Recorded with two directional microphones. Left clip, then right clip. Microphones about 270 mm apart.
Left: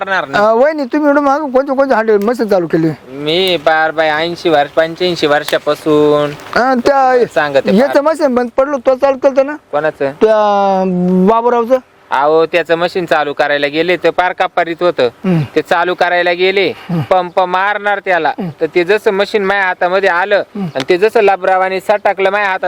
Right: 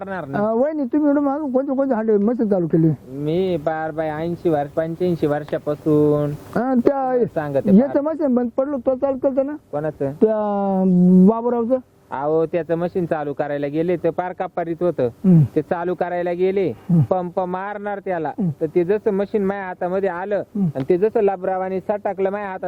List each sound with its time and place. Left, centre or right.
0.1 s speech: centre
0.4 s speech: centre
0.7 s speech: centre
2.4 s speech: left
2.7 s speech: centre